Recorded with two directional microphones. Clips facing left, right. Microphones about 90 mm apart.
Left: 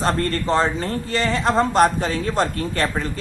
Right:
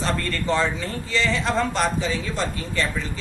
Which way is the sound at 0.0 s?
40° left (ahead or behind).